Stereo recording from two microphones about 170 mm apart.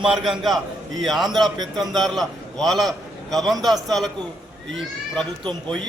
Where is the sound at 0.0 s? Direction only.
Centre (ahead or behind).